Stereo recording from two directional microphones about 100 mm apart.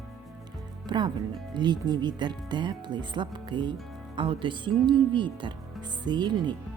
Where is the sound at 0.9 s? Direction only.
50° right (ahead or behind).